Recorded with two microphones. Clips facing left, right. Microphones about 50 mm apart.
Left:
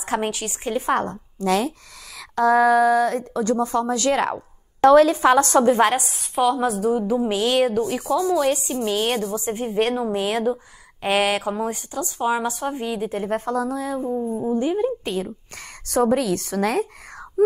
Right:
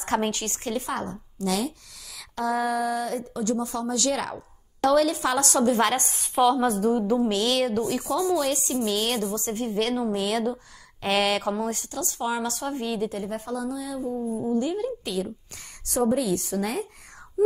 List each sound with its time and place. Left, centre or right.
0.0 s a woman's voice: centre
0.8 s speech: left
2.1 s a sound: left
2.6 s speech: left
3.4 s speech: left
5.8 s a woman's voice: centre
6.0 s a woman's voice: centre
7.8 s speech: left
9.3 s a woman's voice: centre
13.2 s speech: left
14.1 s speech: left
15.9 s a woman's voice: left